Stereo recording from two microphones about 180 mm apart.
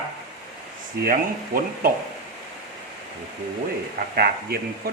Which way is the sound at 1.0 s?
55° right (ahead or behind).